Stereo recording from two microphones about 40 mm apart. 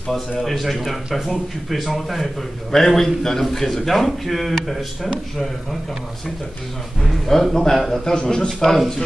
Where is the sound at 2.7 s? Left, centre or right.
Centre.